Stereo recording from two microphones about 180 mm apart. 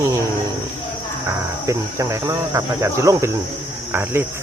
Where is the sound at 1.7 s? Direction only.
15° right (ahead or behind).